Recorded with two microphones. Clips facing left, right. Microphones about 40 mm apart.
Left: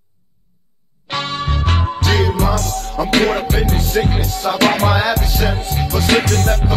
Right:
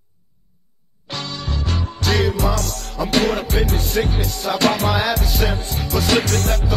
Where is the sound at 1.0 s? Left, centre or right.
Left.